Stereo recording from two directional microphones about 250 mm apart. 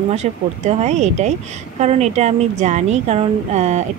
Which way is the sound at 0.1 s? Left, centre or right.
Right.